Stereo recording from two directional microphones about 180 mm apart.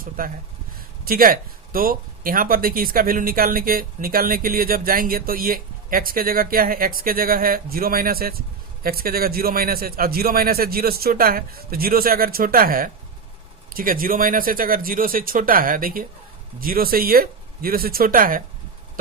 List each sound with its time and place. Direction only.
1.0 s a man's voice: 55° right (ahead or behind)